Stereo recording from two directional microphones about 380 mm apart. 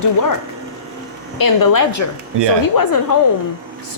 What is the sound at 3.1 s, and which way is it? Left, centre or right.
Speech, left.